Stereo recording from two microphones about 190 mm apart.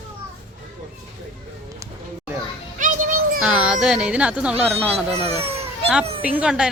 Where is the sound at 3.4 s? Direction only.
5° right (ahead or behind).